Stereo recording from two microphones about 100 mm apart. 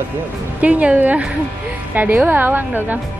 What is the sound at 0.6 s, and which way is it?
A woman's voice, 15° right (ahead or behind).